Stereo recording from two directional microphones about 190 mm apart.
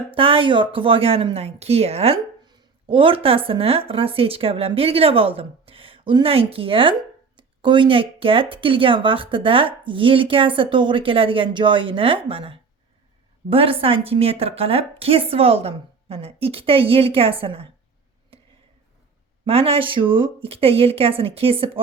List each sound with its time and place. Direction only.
0.1 s a woman's voice: 30° right (ahead or behind)
19.5 s a woman's voice: 30° right (ahead or behind)